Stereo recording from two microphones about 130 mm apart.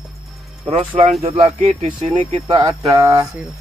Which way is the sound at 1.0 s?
60° right (ahead or behind).